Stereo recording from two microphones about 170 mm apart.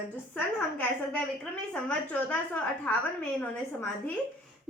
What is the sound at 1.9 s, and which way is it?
Speech, 10° left (ahead or behind).